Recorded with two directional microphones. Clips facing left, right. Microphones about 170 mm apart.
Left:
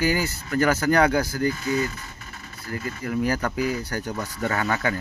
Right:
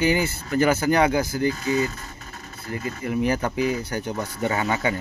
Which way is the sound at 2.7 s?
20° right (ahead or behind).